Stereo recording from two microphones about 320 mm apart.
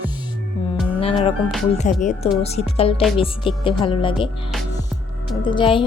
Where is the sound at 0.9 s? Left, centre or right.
Centre.